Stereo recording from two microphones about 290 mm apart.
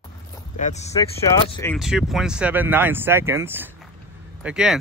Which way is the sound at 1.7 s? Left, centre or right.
Centre.